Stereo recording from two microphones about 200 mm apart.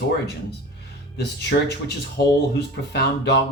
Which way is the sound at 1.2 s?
55° left (ahead or behind).